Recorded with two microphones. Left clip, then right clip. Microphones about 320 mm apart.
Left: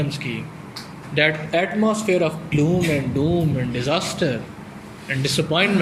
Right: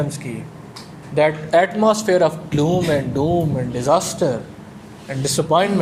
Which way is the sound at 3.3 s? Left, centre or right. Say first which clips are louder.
Right 3 dB; right.